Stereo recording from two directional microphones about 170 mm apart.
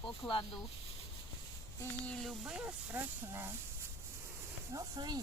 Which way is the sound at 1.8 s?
5° left (ahead or behind).